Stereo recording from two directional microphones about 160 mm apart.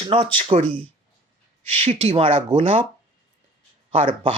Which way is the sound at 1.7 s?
40° right (ahead or behind).